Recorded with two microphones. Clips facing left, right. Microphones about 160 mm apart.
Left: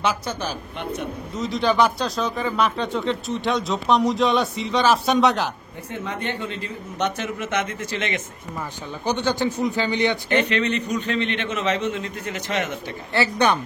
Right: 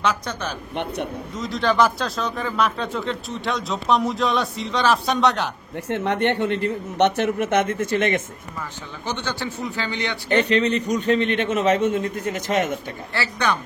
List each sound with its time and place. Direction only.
1.4 s speech: centre (ahead or behind)
5.9 s speech: 75° right (ahead or behind); by 8.2 s 50° right (ahead or behind)
9.2 s speech: 20° left (ahead or behind)
10.5 s a man's voice: 40° right (ahead or behind)
13.1 s speech: 20° left (ahead or behind)